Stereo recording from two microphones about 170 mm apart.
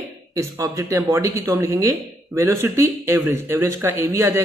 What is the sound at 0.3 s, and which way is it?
Speech, 20° right (ahead or behind).